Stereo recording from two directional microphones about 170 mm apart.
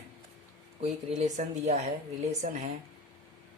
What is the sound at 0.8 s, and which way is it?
Speech, 40° right (ahead or behind).